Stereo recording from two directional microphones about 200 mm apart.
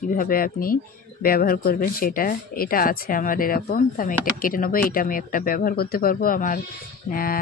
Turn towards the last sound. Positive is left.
turn(degrees=45)  # may be behind; listen again after turning